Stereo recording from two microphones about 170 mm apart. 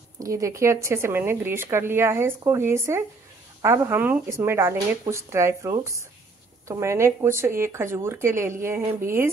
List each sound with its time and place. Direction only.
0.2 s speech: 20° right (ahead or behind)